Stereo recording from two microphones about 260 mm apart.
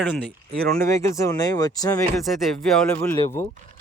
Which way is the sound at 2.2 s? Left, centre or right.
Centre.